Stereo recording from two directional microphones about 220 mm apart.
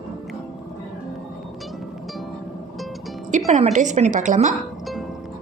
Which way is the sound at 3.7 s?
35° right (ahead or behind).